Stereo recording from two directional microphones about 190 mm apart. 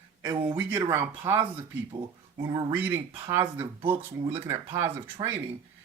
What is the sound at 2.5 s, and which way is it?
Speech, 25° right (ahead or behind).